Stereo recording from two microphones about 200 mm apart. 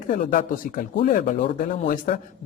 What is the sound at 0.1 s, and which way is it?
Speech, 40° left (ahead or behind).